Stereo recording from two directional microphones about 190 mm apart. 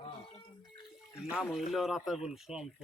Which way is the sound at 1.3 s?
Centre (ahead or behind).